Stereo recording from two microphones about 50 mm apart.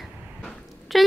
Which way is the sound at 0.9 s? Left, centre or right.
Centre.